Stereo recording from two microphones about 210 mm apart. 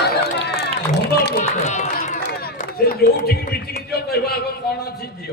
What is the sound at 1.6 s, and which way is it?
Run, 35° left (ahead or behind).